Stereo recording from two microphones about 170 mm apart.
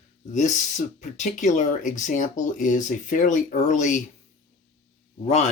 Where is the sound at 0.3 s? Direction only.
45° left (ahead or behind).